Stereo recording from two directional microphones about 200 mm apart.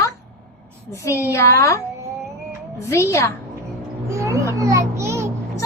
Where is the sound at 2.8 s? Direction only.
15° left (ahead or behind).